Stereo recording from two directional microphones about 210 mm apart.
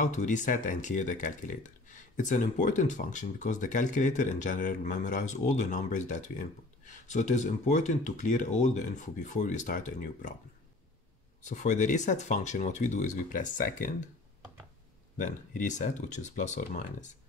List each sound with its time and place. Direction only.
0.0 s speech: 35° left (ahead or behind)
11.4 s speech: 35° left (ahead or behind)
15.1 s speech: 35° left (ahead or behind)